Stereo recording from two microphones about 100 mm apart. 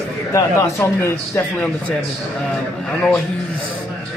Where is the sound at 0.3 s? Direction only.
30° left (ahead or behind).